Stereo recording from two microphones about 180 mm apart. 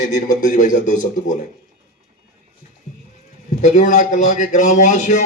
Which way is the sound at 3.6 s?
45° left (ahead or behind).